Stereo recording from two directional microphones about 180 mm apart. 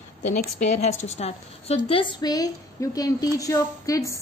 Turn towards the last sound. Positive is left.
turn(degrees=20)  # may be behind; listen again after turning